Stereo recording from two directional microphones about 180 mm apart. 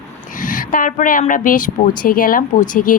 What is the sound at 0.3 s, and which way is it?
Speech, 50° left (ahead or behind).